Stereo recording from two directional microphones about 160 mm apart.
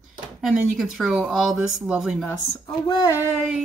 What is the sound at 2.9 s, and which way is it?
Child singing, 25° left (ahead or behind).